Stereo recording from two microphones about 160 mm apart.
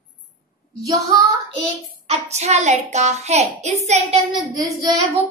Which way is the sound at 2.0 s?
45° right (ahead or behind).